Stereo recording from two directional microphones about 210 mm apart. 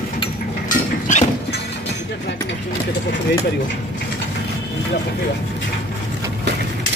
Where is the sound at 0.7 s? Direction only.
35° left (ahead or behind).